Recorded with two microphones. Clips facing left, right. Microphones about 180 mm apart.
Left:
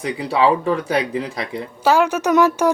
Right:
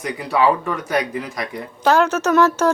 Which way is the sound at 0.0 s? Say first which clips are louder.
Left 1 dB; 30° left (ahead or behind).